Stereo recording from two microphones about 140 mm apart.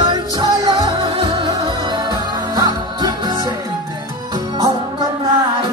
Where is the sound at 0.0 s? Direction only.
30° right (ahead or behind).